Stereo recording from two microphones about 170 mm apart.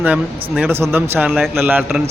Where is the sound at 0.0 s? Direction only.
5° right (ahead or behind).